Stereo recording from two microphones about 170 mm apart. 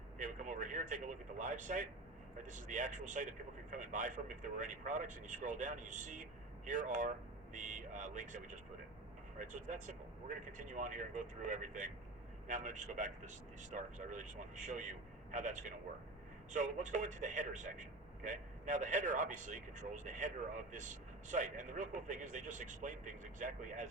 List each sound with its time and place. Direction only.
0.2 s speech: 45° right (ahead or behind)